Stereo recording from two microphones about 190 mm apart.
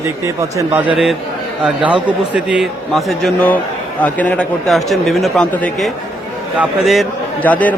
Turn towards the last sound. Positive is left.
turn(degrees=10)  # may be behind; listen again after turning